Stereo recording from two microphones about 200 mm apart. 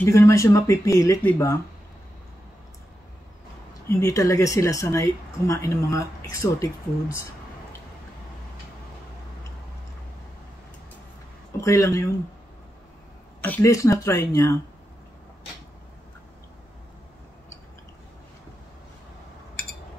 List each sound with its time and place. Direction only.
0.0 s speech: 15° left (ahead or behind)
3.9 s speech: 15° left (ahead or behind)
11.6 s speech: 15° left (ahead or behind)
13.4 s speech: 10° left (ahead or behind)